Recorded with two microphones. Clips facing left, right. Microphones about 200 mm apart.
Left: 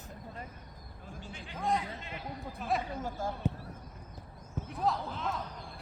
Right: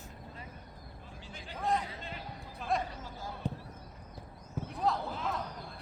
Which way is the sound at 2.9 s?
50° left (ahead or behind).